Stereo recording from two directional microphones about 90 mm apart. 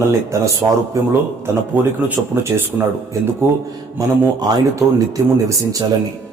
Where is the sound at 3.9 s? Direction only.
50° right (ahead or behind).